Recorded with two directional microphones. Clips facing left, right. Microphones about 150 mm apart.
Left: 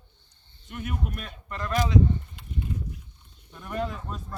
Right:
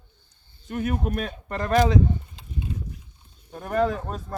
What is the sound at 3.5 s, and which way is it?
Speech, 45° right (ahead or behind).